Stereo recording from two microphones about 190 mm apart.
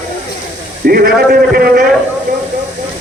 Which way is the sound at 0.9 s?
50° right (ahead or behind).